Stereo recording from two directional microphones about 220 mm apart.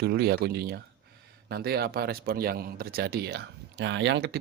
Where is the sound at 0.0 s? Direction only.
45° right (ahead or behind).